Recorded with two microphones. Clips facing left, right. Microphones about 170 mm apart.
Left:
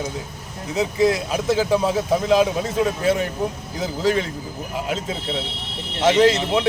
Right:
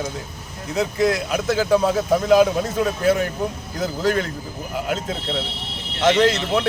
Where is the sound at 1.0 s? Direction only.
25° left (ahead or behind).